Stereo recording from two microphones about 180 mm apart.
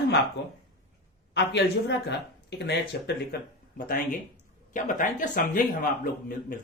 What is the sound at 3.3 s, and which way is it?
Speech, 60° left (ahead or behind).